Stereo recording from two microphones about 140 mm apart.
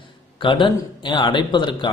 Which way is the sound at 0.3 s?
35° left (ahead or behind).